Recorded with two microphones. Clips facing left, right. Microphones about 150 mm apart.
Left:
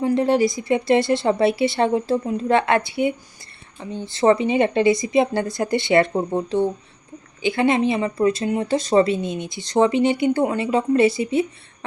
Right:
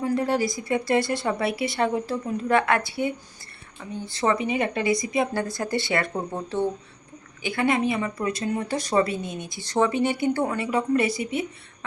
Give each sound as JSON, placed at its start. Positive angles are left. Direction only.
{"t": 0.0, "sound": "speech", "side_deg": 25}